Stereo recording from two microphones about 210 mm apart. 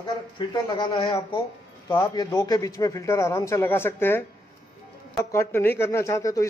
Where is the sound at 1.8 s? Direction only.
15° left (ahead or behind).